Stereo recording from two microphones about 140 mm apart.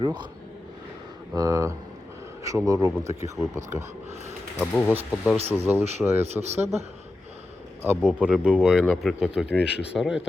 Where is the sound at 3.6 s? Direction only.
60° right (ahead or behind).